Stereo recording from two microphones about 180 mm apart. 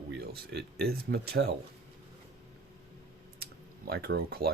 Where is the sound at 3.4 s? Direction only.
60° right (ahead or behind).